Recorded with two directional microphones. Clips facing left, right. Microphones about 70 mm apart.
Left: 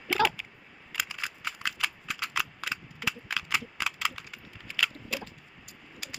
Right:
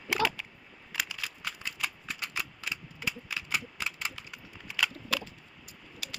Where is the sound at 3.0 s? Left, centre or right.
Left.